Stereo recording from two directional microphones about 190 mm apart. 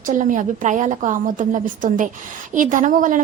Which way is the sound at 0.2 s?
40° right (ahead or behind).